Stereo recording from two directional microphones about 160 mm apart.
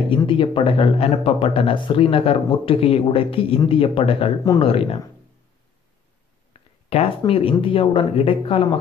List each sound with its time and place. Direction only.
0.1 s speech: 30° left (ahead or behind)
6.5 s a sound: 35° left (ahead or behind)
7.6 s speech: 35° left (ahead or behind)